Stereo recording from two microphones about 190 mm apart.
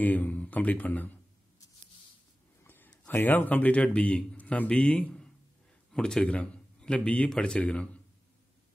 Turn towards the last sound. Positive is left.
turn(degrees=5)  # may be behind; listen again after turning